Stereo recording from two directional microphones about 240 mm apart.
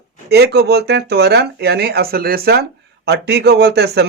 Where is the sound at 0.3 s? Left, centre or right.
Right.